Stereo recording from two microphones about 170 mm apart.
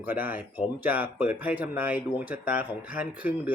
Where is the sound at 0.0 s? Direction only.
10° right (ahead or behind).